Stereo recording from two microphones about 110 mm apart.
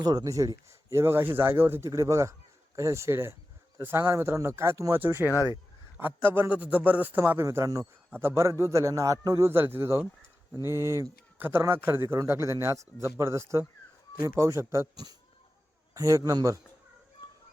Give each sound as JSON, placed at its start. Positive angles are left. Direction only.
{"t": 0.0, "sound": "speech", "side_deg": -35}
{"t": 7.4, "sound": "a man's voice", "side_deg": -30}
{"t": 8.1, "sound": "a man's voice", "side_deg": -20}
{"t": 9.5, "sound": "a man's voice", "side_deg": -20}